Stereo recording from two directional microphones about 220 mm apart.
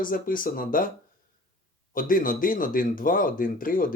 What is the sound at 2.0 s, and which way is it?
Speech, 40° left (ahead or behind).